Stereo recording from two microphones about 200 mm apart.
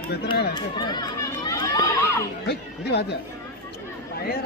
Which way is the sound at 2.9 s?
55° left (ahead or behind).